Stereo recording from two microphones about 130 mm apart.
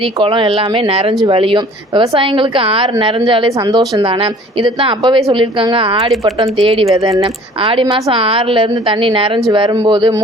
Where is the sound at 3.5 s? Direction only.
30° right (ahead or behind).